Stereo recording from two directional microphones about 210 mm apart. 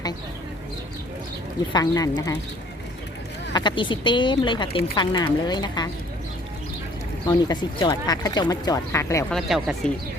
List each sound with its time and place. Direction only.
1.7 s speech: 20° left (ahead or behind)
3.5 s speech: 20° left (ahead or behind)
7.3 s speech: 20° left (ahead or behind)
9.3 s speech: centre (ahead or behind)